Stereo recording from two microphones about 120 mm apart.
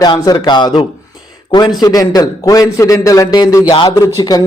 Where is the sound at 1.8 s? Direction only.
30° left (ahead or behind).